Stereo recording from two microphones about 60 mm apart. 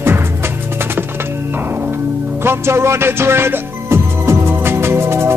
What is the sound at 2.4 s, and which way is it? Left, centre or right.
Music, right.